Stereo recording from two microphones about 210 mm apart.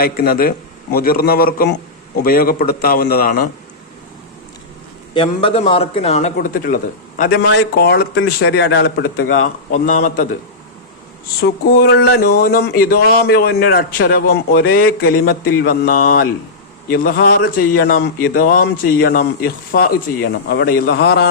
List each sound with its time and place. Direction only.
0.0 s speech: 45° left (ahead or behind)
5.1 s a man's voice: 25° left (ahead or behind); by 10.2 s 40° left (ahead or behind)
11.4 s speech: 50° left (ahead or behind)